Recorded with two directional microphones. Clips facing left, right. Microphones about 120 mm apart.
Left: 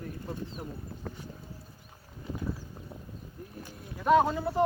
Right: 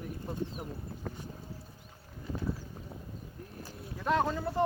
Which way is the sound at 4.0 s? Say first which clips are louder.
Left 6 dB; 10° left (ahead or behind).